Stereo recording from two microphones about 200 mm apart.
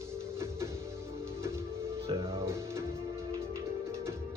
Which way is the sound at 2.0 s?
15° right (ahead or behind).